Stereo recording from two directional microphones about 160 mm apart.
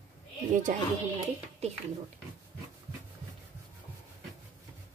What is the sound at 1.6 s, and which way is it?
Speech, 45° right (ahead or behind).